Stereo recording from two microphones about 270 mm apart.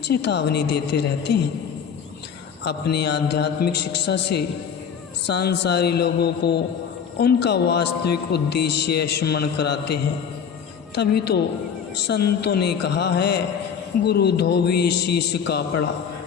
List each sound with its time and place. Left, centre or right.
0.1 s a man's voice: left
2.6 s a man's voice: left